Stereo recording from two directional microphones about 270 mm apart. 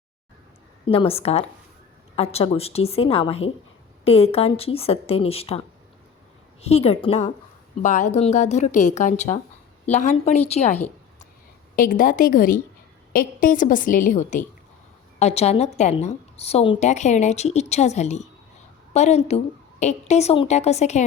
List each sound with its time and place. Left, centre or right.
0.9 s a woman's voice: left
11.8 s a woman's voice: left